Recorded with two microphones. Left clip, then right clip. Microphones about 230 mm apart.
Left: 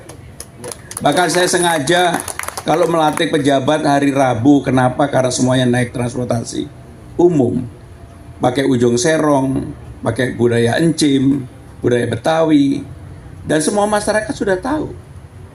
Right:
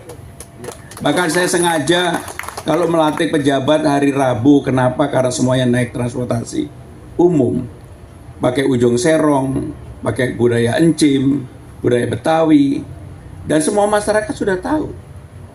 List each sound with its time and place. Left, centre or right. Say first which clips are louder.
0.3 s a man's voice: left 2 dB; left